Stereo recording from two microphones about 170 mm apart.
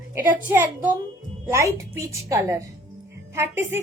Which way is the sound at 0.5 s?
10° right (ahead or behind).